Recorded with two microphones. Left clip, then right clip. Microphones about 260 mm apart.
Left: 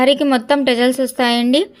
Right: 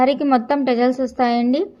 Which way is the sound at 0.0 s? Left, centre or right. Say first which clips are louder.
Left 2 dB; left.